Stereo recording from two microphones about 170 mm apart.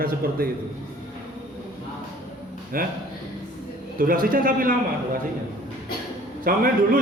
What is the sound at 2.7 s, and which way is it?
Speech, 55° right (ahead or behind).